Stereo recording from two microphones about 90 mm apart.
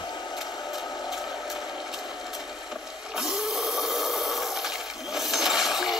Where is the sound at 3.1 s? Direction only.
5° right (ahead or behind).